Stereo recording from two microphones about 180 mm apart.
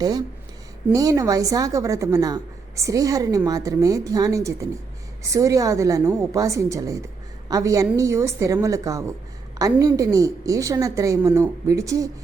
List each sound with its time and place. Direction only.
0.0 s a woman's voice: 20° right (ahead or behind)